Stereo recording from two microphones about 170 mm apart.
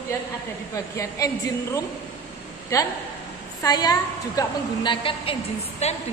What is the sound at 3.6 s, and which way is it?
A woman's voice, 20° left (ahead or behind).